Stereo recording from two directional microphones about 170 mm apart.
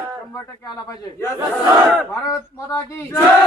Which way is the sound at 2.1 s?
20° left (ahead or behind).